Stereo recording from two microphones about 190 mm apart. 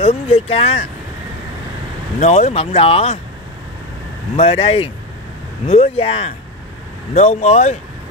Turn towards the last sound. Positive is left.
turn(degrees=35)  # may be behind; listen again after turning